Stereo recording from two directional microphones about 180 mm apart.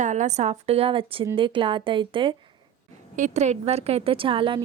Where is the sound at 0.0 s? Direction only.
40° right (ahead or behind).